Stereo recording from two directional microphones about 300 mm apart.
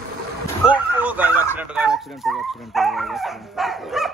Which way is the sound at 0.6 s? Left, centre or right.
Centre.